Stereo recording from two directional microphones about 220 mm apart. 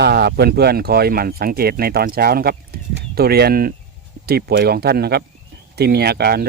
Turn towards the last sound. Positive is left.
turn(degrees=-45)  # may be behind; listen again after turning